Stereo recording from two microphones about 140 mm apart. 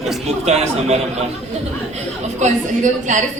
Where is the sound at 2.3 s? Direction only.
60° right (ahead or behind).